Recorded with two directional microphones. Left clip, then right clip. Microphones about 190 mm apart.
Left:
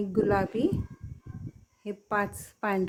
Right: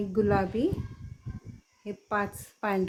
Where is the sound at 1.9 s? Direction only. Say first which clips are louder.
Left 1 dB; 15° left (ahead or behind).